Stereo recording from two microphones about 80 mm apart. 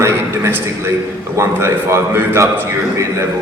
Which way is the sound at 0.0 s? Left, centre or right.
Right.